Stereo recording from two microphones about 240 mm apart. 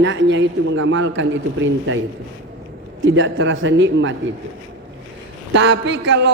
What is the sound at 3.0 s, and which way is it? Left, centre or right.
A man's voice, right.